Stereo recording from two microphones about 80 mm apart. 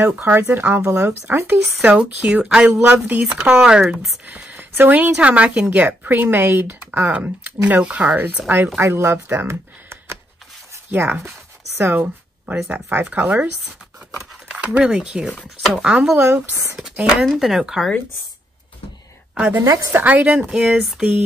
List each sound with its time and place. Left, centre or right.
0.0 s a woman's voice: right
1.9 s a woman's voice: centre
8.7 s a woman's voice: right
14.5 s speech: centre
16.2 s a woman's voice: right
17.2 s speech: centre
19.6 s a woman's voice: right
19.9 s speech: right